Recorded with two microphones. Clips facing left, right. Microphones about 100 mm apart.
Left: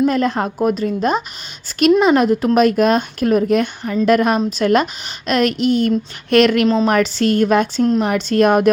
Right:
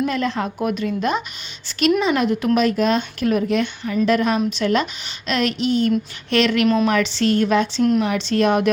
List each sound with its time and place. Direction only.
0.1 s a woman's voice: 45° left (ahead or behind)
7.8 s a woman's voice: 30° left (ahead or behind)
8.0 s a woman's voice: 45° left (ahead or behind)